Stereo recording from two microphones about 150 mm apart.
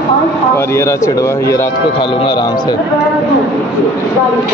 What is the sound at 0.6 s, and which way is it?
Speech, 15° left (ahead or behind).